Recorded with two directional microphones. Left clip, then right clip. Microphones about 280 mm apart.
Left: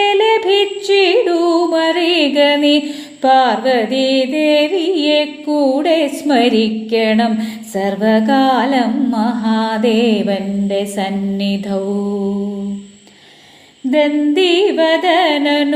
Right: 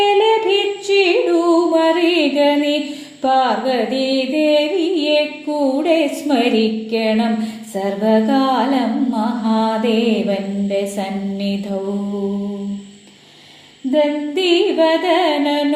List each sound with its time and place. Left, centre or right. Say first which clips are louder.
0.0 s music: left 1 dB; left
7.8 s carnatic music: left 2 dB; left
13.9 s carnatic music: left 3 dB; left